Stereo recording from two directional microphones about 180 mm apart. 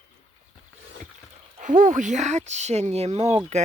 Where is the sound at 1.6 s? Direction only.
45° right (ahead or behind).